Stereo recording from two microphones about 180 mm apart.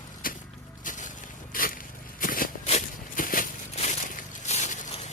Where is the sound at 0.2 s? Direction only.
50° left (ahead or behind).